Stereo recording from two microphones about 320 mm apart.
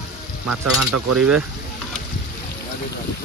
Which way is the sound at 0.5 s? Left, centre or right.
Right.